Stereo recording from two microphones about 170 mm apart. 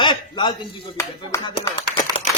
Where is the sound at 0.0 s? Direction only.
25° left (ahead or behind).